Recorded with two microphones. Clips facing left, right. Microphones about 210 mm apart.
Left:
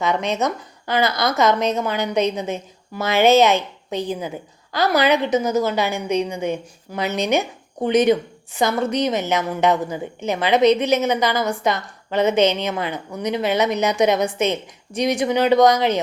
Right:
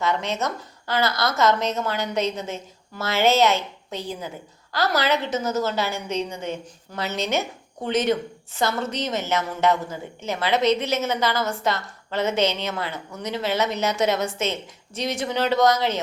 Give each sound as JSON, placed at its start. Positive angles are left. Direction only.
{"t": 0.0, "sound": "a woman's voice", "side_deg": 15}